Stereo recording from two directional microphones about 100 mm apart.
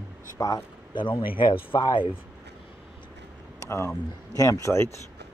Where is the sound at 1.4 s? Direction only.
55° left (ahead or behind).